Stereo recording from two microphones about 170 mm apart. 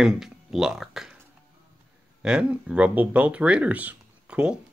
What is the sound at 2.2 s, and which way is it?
Speech, 5° right (ahead or behind).